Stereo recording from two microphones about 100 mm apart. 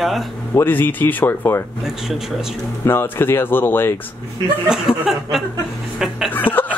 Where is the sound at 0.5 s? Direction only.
20° left (ahead or behind).